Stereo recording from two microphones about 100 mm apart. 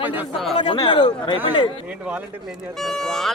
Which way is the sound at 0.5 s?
50° left (ahead or behind).